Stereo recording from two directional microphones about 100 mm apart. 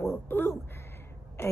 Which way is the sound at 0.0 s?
25° left (ahead or behind).